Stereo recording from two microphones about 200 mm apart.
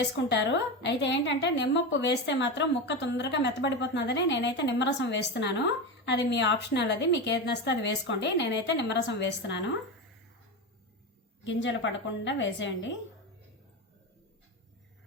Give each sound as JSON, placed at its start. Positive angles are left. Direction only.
{"t": 0.0, "sound": "a woman's voice", "side_deg": 60}
{"t": 11.4, "sound": "a woman's voice", "side_deg": 65}